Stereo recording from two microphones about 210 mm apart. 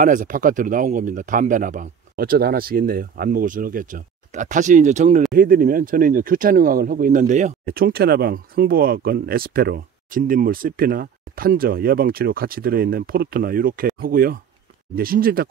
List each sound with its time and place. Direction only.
0.0 s speech: 40° right (ahead or behind)